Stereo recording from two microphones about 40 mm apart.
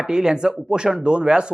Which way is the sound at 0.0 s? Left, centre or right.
Centre.